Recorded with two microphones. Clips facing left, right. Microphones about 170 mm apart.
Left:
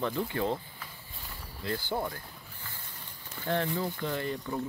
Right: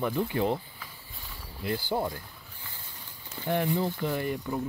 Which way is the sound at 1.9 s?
20° right (ahead or behind).